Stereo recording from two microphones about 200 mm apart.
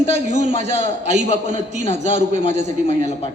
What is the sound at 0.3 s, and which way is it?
A man's voice, 35° right (ahead or behind).